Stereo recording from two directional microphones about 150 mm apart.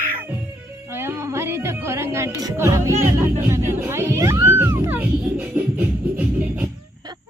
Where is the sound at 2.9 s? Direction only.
50° right (ahead or behind).